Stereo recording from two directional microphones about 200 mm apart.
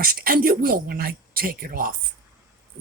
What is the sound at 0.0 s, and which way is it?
Speech, 45° right (ahead or behind).